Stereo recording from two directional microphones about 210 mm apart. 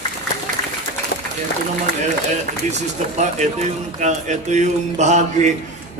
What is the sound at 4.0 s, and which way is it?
A man's voice, 35° right (ahead or behind).